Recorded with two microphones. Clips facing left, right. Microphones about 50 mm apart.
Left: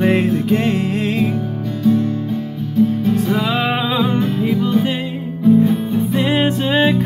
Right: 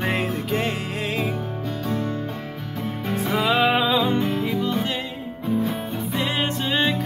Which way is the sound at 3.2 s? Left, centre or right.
Centre.